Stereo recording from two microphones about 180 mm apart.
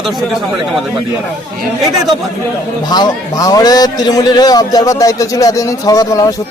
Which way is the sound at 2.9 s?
20° left (ahead or behind).